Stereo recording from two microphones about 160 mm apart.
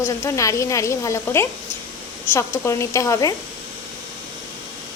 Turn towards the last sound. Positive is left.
turn(degrees=20)  # may be behind; listen again after turning